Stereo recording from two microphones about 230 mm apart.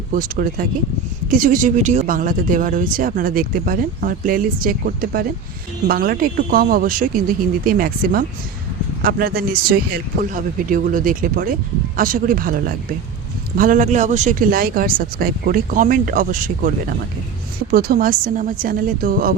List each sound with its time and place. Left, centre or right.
0.1 s speech: right